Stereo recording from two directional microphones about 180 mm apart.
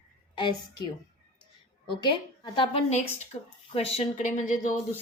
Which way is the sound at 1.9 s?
25° left (ahead or behind).